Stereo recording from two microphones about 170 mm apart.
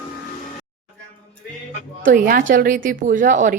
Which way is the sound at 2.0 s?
55° right (ahead or behind).